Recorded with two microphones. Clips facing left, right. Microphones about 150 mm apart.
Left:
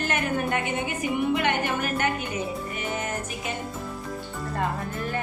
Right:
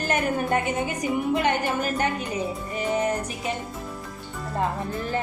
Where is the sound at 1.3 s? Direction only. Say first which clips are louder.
Right 1 dB; 40° right (ahead or behind).